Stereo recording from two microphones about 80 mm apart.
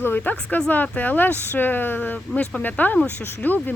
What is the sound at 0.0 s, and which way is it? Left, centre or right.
Speech, left.